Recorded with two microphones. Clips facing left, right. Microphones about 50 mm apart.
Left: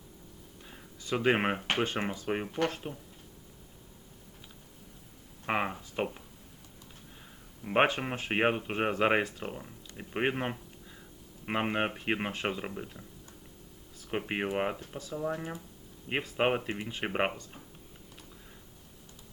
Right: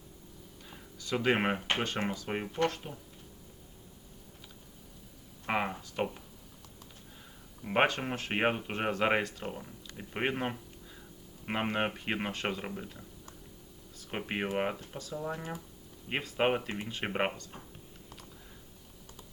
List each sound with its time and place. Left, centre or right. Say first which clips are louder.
0.7 s a sound: left 1 dB; centre
1.4 s speech: left 1 dB; centre
2.3 s speech: left 3 dB; centre
2.8 s speech: left 4 dB; centre
5.5 s speech: left 1 dB; centre
7.6 s speech: left 1 dB; centre
14.1 s speech: left 2 dB; centre